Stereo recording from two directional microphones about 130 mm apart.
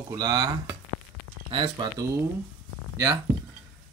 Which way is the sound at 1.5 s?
45° right (ahead or behind).